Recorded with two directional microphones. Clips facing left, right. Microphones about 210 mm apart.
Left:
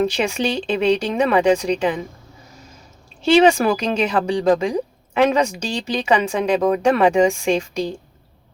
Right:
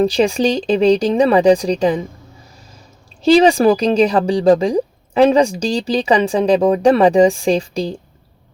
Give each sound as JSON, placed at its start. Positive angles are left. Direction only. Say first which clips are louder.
{"t": 0.0, "sound": "speech", "louder": "right 6 dB", "side_deg": -35}
{"t": 3.2, "sound": "speech", "louder": "right 3 dB", "side_deg": -35}